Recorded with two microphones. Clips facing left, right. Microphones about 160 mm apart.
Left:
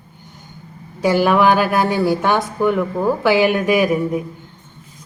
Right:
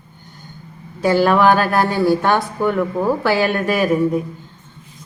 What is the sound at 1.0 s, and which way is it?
Speech, 15° left (ahead or behind).